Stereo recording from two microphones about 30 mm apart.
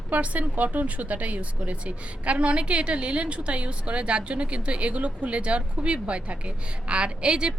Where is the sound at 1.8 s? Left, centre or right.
Right.